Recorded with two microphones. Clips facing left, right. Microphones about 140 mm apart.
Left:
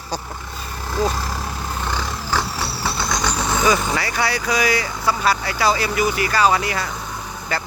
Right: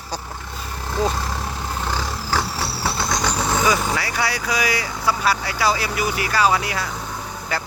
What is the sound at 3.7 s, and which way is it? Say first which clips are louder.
Speech: left 1 dB; 5° right (ahead or behind).